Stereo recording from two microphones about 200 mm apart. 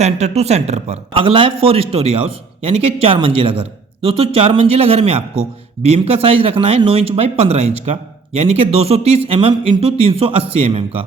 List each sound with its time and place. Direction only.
0.0 s speech: 30° right (ahead or behind)